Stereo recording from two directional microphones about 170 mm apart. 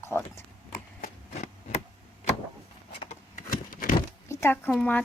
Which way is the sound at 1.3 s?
40° left (ahead or behind).